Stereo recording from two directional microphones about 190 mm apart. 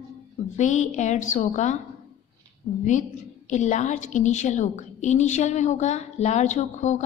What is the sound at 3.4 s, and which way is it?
A woman's voice, 40° left (ahead or behind).